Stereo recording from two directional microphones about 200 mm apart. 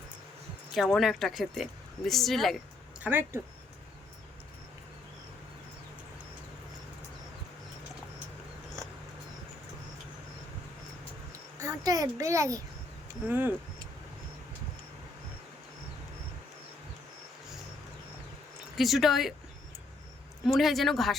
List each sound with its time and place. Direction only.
0.7 s speech: centre (ahead or behind)
3.0 s speech: 10° right (ahead or behind)
11.6 s a sound: 20° right (ahead or behind)
13.2 s speech: 10° right (ahead or behind)
18.8 s speech: centre (ahead or behind)
20.5 s speech: centre (ahead or behind)